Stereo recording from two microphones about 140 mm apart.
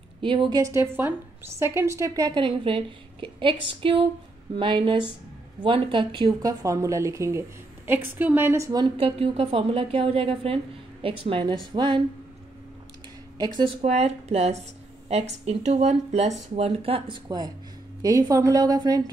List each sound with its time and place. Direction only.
0.2 s a woman's voice: 35° right (ahead or behind)
6.6 s a woman's voice: 20° right (ahead or behind)
8.8 s a woman's voice: 45° right (ahead or behind)
13.4 s a woman's voice: 30° right (ahead or behind)
13.8 s a woman's voice: 50° right (ahead or behind)
18.0 s a woman's voice: 25° right (ahead or behind)